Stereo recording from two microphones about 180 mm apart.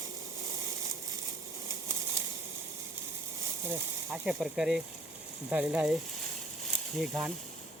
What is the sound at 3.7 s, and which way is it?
Speech, 5° right (ahead or behind).